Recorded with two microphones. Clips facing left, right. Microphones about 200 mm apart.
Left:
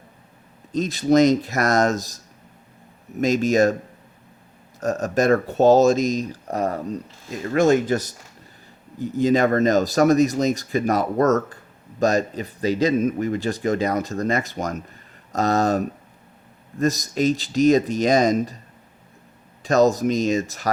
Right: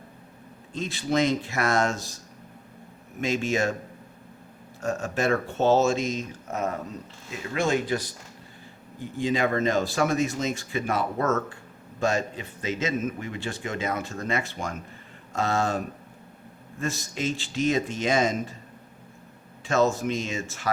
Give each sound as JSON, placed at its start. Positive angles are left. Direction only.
{"t": 0.7, "sound": "a man's voice", "side_deg": 40}
{"t": 3.2, "sound": "a man's voice", "side_deg": 40}
{"t": 4.8, "sound": "a man's voice", "side_deg": 40}
{"t": 19.6, "sound": "a man's voice", "side_deg": 40}